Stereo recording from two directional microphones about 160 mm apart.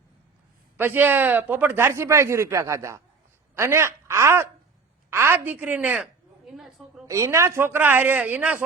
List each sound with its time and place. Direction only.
0.8 s a woman's voice: 10° right (ahead or behind)
7.1 s speech: 20° right (ahead or behind)